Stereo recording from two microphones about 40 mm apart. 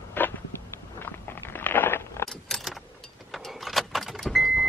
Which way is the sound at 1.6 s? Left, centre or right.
Left.